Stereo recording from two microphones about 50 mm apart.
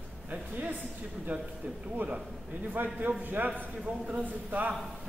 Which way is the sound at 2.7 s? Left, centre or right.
Right.